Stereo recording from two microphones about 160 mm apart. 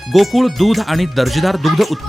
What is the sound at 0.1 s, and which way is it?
Speech, centre (ahead or behind).